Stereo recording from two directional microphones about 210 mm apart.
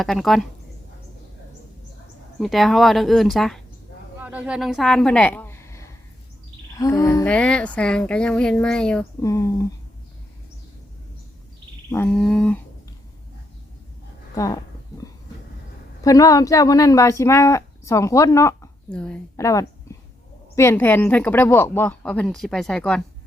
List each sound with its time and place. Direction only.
0.0 s speech: centre (ahead or behind)
2.4 s a woman's voice: centre (ahead or behind)
9.2 s speech: 15° left (ahead or behind)
11.9 s speech: 10° left (ahead or behind)
14.3 s speech: 15° left (ahead or behind)
16.0 s speech: 15° left (ahead or behind)
19.4 s a sound: 15° left (ahead or behind)
20.6 s speech: 10° left (ahead or behind)